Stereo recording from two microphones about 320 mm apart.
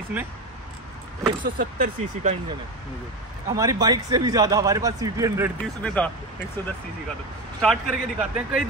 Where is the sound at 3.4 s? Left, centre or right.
Centre.